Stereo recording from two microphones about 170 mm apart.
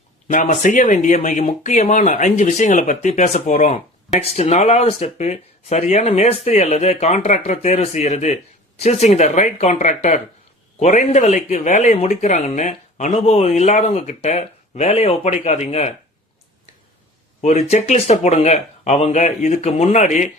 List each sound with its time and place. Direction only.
0.3 s speech: 50° left (ahead or behind)
17.4 s speech: 40° left (ahead or behind)